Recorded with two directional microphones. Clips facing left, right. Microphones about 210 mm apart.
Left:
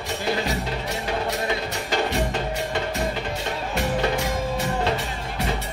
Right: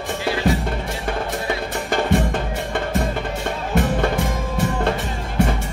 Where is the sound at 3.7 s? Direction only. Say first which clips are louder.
Right 4 dB; 50° right (ahead or behind).